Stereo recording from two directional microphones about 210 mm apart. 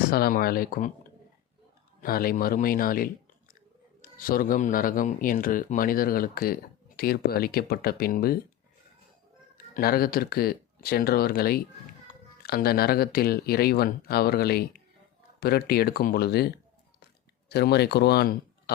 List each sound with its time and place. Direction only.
0.1 s speech: 45° left (ahead or behind)
2.0 s speech: 45° left (ahead or behind)
9.7 s speech: 45° left (ahead or behind)